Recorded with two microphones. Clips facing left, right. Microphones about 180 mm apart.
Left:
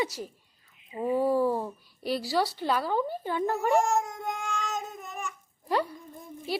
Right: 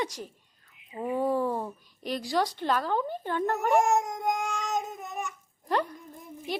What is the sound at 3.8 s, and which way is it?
Baby cry, 20° right (ahead or behind).